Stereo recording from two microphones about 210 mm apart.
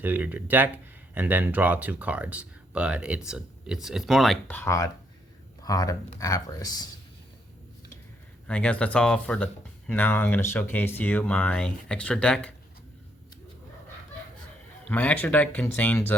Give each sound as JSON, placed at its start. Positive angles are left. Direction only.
{"t": 0.0, "sound": "speech", "side_deg": -10}
{"t": 8.4, "sound": "speech", "side_deg": 5}
{"t": 14.8, "sound": "speech", "side_deg": 10}